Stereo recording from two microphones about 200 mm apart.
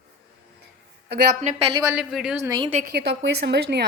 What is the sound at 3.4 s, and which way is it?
Speech, 55° right (ahead or behind).